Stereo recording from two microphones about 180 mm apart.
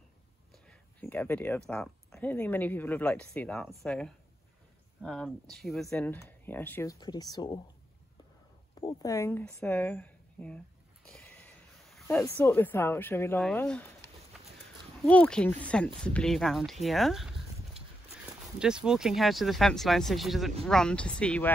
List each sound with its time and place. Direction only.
0.7 s a sound: 10° left (ahead or behind)
1.7 s speech: 5° left (ahead or behind); by 7.6 s 25° left (ahead or behind)
8.8 s speech: 15° left (ahead or behind)
11.1 s a sound: 5° left (ahead or behind)
13.4 s speech: 5° left (ahead or behind)
15.0 s speech: 5° left (ahead or behind)
18.6 s speech: 5° right (ahead or behind)